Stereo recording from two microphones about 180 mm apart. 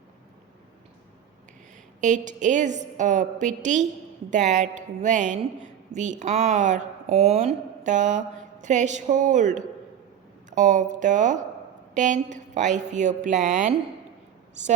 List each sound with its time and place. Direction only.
2.0 s a woman's voice: 45° right (ahead or behind)